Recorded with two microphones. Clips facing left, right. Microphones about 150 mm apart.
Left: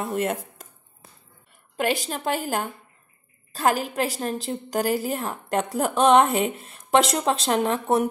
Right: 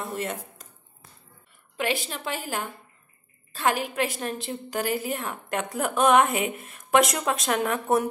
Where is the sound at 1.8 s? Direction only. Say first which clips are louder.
Left 4 dB; 40° left (ahead or behind).